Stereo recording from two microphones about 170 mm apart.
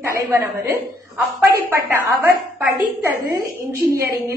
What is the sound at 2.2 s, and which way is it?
A woman's voice, 15° right (ahead or behind).